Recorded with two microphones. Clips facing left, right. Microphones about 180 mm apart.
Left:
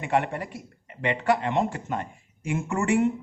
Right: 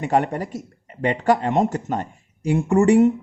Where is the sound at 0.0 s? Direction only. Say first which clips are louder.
Right 5 dB; 40° right (ahead or behind).